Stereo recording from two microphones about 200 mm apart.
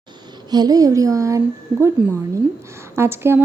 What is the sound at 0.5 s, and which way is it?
Speech, 20° right (ahead or behind).